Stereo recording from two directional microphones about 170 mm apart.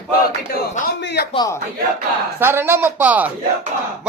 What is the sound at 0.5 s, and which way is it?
Speech, 65° left (ahead or behind).